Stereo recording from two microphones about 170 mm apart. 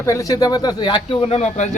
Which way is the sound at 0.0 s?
20° left (ahead or behind).